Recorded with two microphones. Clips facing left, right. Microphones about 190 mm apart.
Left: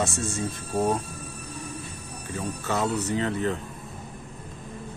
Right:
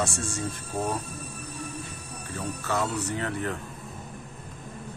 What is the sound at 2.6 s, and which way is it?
Speech, 20° left (ahead or behind).